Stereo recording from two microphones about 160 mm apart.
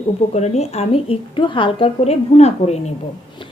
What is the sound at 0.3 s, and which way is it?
A woman's voice, 40° left (ahead or behind).